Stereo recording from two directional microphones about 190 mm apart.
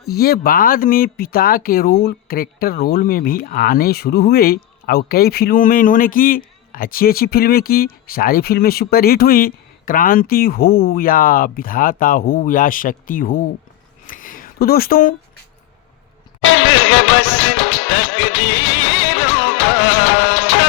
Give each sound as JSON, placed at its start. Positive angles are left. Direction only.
{"t": 0.1, "sound": "speech", "side_deg": 50}
{"t": 14.1, "sound": "a sound", "side_deg": 45}
{"t": 16.4, "sound": "music", "side_deg": 90}